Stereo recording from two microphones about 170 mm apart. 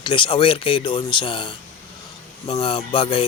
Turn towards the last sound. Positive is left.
turn(degrees=30)  # may be behind; listen again after turning